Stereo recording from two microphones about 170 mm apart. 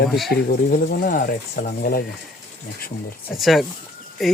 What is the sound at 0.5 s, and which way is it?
Speech, 55° left (ahead or behind).